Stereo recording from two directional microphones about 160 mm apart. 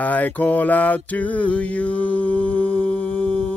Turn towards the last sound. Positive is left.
turn(degrees=10)  # may be behind; listen again after turning